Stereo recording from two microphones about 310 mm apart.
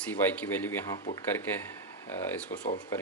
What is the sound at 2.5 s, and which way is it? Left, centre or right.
Speech, left.